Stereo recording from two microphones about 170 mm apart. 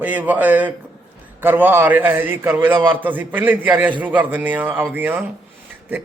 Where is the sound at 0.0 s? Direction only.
10° right (ahead or behind).